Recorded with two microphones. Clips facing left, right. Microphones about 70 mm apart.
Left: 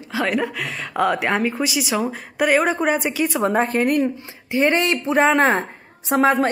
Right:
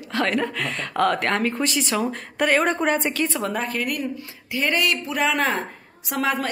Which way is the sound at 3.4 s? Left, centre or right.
Left.